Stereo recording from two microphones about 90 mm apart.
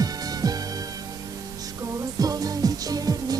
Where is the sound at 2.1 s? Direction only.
45° right (ahead or behind).